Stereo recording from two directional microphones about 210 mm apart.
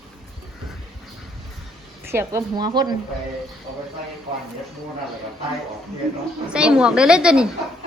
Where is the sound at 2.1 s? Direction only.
10° right (ahead or behind).